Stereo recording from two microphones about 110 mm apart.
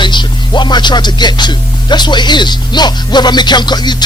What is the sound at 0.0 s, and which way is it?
Speech, 45° left (ahead or behind).